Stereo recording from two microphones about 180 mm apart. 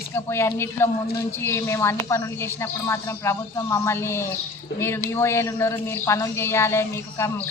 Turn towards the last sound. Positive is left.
turn(degrees=15)  # may be behind; listen again after turning